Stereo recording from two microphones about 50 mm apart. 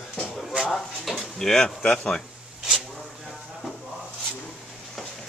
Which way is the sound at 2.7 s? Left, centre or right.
Centre.